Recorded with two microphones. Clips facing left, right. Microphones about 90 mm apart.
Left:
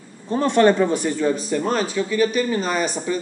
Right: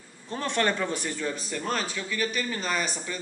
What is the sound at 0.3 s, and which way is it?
A man's voice, 20° left (ahead or behind).